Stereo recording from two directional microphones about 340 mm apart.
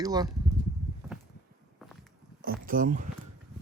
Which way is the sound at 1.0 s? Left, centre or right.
Centre.